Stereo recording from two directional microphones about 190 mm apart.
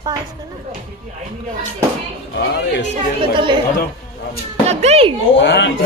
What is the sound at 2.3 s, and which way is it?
Speech, 65° left (ahead or behind).